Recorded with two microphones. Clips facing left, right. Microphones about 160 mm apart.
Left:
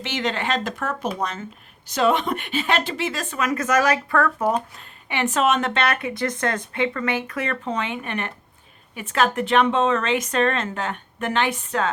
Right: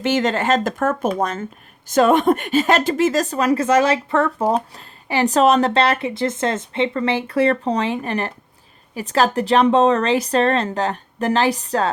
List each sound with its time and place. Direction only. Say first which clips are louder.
0.0 s a woman's voice: right 7 dB; 45° right (ahead or behind)